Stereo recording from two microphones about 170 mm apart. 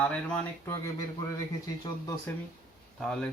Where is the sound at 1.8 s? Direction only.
15° left (ahead or behind).